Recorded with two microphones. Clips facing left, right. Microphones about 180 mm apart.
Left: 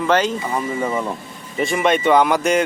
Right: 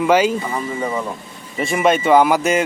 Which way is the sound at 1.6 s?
Centre (ahead or behind).